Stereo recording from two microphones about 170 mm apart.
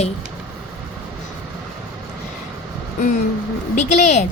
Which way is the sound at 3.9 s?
40° left (ahead or behind).